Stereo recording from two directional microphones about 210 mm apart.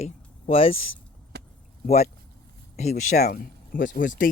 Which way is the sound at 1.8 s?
30° left (ahead or behind).